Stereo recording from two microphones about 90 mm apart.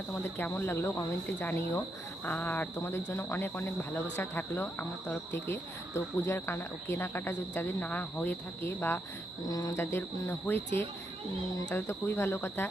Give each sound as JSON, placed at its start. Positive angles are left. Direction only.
{"t": 0.1, "sound": "speech", "side_deg": 20}
{"t": 9.5, "sound": "cricket", "side_deg": 40}
{"t": 9.7, "sound": "speech", "side_deg": 25}